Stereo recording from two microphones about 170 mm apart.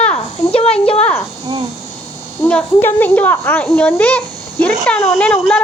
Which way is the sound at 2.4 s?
10° left (ahead or behind).